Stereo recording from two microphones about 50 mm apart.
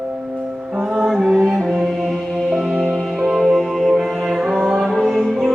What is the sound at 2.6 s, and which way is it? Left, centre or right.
Music, centre.